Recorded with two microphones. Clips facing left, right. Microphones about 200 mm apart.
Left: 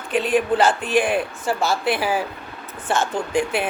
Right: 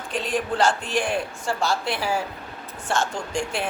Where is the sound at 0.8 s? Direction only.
55° left (ahead or behind).